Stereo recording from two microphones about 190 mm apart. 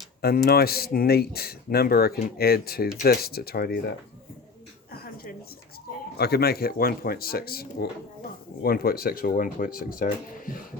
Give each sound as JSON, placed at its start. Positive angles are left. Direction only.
{"t": 0.2, "sound": "speech", "side_deg": 55}
{"t": 5.0, "sound": "a sound", "side_deg": 50}
{"t": 6.1, "sound": "speech", "side_deg": 55}